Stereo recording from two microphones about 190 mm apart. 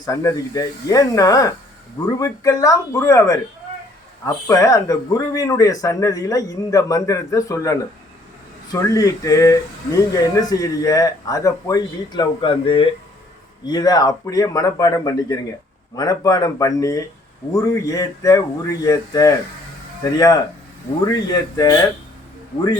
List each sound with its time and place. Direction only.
0.0 s speech: 15° left (ahead or behind)